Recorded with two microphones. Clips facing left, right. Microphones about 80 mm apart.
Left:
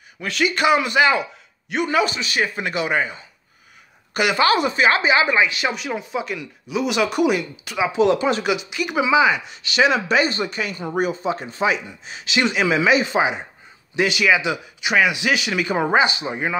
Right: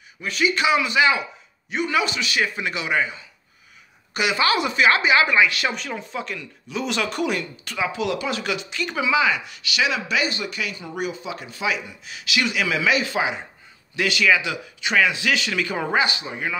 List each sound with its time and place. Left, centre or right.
0.2 s a man's voice: left
0.6 s speech: left
5.7 s speech: centre
8.0 s speech: left
8.5 s speech: centre